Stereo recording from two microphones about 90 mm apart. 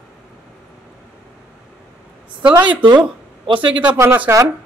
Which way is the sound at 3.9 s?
25° right (ahead or behind).